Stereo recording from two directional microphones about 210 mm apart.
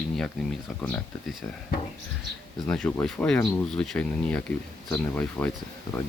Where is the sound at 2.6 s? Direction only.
5° left (ahead or behind).